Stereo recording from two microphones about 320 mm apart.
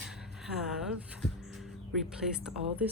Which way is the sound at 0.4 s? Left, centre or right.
Centre.